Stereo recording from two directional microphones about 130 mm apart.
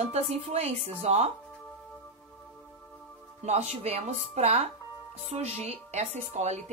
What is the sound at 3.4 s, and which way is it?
Speech, 55° right (ahead or behind).